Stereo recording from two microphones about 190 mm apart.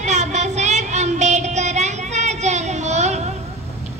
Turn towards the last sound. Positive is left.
turn(degrees=-35)  # may be behind; listen again after turning